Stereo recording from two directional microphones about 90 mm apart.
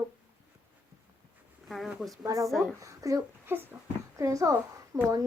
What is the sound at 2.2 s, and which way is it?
Speech, 40° right (ahead or behind).